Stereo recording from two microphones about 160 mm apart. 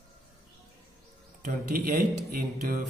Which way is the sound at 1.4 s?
60° right (ahead or behind).